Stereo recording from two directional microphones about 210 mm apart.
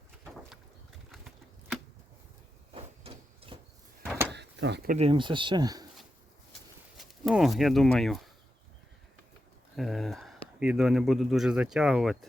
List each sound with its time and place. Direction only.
2.7 s printer: 25° right (ahead or behind)
4.3 s door: 55° right (ahead or behind)
4.9 s speech: 25° right (ahead or behind)
6.9 s speech: centre (ahead or behind)
9.7 s speech: centre (ahead or behind)